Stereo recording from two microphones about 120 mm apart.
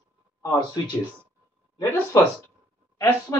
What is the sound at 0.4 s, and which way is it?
Speech, 30° left (ahead or behind).